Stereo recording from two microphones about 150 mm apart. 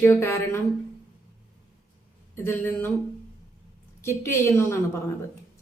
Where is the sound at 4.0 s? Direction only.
15° left (ahead or behind).